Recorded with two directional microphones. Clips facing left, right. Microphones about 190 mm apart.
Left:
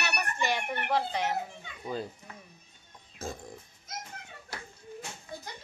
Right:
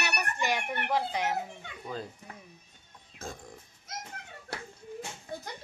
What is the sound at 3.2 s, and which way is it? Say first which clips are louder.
Speech: left 3 dB; 5° left (ahead or behind).